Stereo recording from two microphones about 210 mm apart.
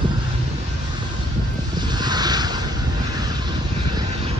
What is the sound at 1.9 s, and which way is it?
Vehicle, 20° right (ahead or behind).